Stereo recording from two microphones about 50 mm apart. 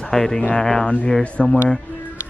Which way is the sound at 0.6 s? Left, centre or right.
Centre.